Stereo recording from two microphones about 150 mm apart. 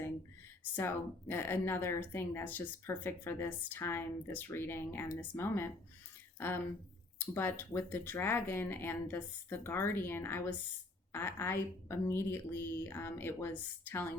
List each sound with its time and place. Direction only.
0.8 s speech: 15° left (ahead or behind)